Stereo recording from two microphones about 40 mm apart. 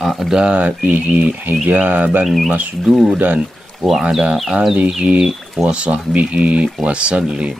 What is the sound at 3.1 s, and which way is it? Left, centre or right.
Speech, right.